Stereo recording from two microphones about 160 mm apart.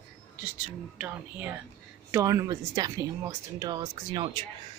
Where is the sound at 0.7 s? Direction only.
10° right (ahead or behind).